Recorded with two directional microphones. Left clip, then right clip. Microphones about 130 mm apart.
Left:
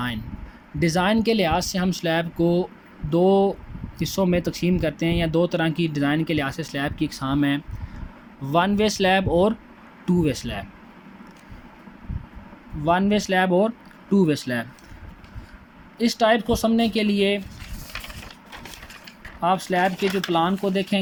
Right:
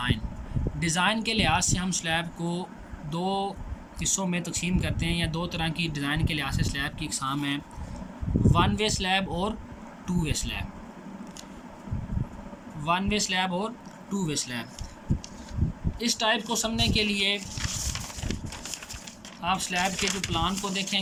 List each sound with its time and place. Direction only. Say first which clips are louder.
0.8 s speech: left 5 dB; 45° left (ahead or behind)
12.8 s speech: left 6 dB; 55° left (ahead or behind)
16.0 s speech: left 7 dB; 55° left (ahead or behind)
19.4 s speech: left 6 dB; 55° left (ahead or behind)